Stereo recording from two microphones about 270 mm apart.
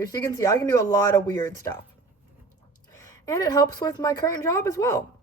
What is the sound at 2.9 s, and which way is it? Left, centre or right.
A woman's voice, centre.